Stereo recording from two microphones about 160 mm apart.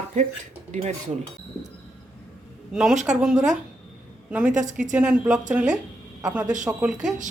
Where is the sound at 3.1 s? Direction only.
5° right (ahead or behind).